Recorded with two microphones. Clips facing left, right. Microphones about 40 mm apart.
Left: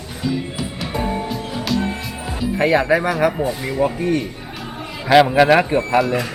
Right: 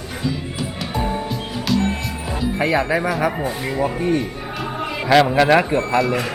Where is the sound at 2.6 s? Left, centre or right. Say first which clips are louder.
Left 4 dB; centre.